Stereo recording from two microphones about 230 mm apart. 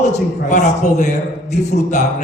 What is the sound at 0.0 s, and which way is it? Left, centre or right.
A man's voice, left.